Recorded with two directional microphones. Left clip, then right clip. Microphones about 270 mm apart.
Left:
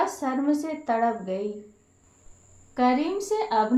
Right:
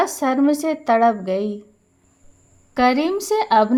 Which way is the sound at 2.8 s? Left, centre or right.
Right.